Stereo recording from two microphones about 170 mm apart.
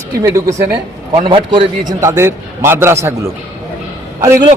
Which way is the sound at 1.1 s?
30° right (ahead or behind).